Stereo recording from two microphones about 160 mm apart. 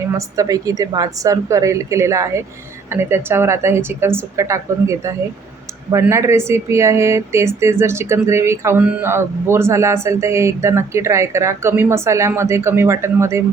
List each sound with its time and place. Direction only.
0.2 s a woman's voice: 20° right (ahead or behind)